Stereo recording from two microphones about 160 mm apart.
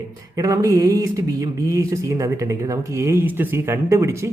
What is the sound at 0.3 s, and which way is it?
A man's voice, 20° right (ahead or behind).